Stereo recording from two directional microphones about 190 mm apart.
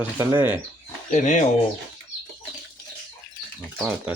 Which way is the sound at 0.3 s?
10° right (ahead or behind).